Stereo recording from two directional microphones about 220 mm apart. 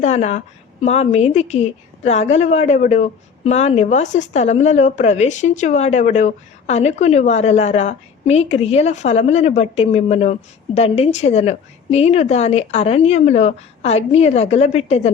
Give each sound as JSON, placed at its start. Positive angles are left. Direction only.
{"t": 0.0, "sound": "a woman's voice", "side_deg": 30}